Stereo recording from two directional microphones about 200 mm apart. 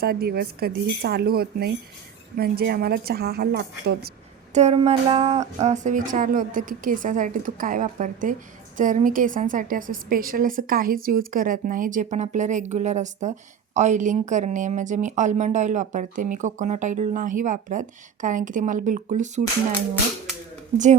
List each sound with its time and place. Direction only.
0.0 s a woman's voice: 50° right (ahead or behind)
4.5 s a woman's voice: 30° right (ahead or behind)
20.7 s speech: 25° right (ahead or behind)